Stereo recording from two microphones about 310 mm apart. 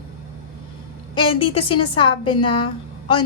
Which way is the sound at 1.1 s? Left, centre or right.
Centre.